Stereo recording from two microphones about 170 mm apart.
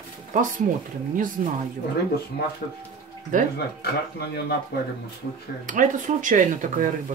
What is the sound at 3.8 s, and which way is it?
Speech, 70° left (ahead or behind).